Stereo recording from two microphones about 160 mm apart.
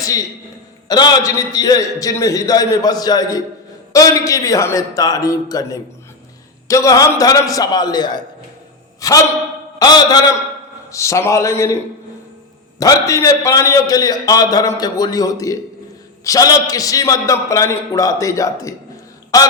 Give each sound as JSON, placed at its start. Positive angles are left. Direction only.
{"t": 0.9, "sound": "a man's voice", "side_deg": 25}
{"t": 12.8, "sound": "a man's voice", "side_deg": 20}